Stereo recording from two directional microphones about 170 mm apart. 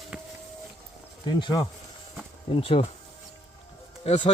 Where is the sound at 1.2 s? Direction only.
25° left (ahead or behind).